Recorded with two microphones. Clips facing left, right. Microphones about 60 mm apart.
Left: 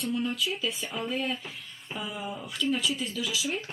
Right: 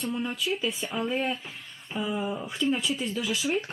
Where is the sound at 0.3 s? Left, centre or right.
Centre.